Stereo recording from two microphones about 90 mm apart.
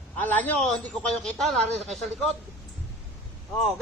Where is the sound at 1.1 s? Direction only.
Centre (ahead or behind).